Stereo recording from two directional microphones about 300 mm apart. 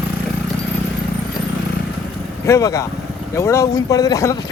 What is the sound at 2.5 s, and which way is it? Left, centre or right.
Speech, centre.